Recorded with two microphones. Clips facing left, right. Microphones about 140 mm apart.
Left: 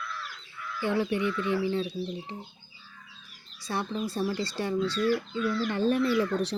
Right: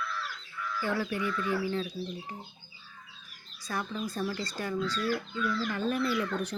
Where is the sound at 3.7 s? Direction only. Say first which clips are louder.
Left 3 dB; 30° left (ahead or behind).